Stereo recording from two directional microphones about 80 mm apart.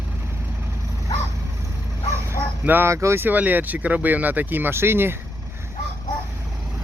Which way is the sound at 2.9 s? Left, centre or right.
Right.